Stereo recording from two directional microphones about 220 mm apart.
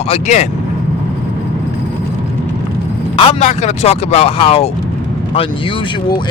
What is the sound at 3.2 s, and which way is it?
Speech, 25° left (ahead or behind).